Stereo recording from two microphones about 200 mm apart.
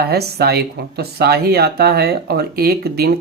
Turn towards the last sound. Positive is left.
turn(degrees=-50)  # may be behind; listen again after turning